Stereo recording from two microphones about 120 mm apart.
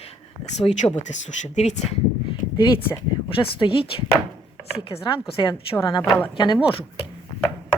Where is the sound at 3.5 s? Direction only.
45° left (ahead or behind).